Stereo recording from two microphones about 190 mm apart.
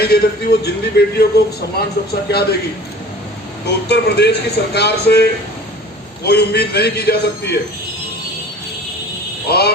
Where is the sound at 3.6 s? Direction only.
60° left (ahead or behind).